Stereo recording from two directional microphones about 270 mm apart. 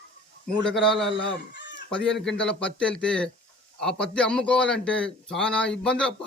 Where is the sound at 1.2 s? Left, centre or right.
Left.